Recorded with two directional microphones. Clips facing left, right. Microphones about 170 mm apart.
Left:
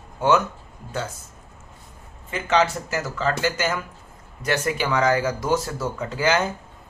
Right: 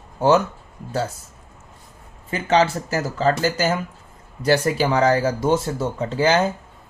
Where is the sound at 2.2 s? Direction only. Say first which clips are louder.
Right 3 dB; 35° right (ahead or behind).